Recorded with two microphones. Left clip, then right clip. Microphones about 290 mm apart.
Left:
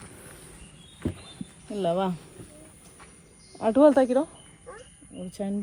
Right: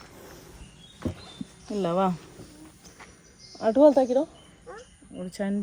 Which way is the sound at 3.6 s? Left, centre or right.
Centre.